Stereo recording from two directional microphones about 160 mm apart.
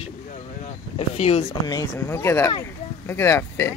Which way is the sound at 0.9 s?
40° left (ahead or behind).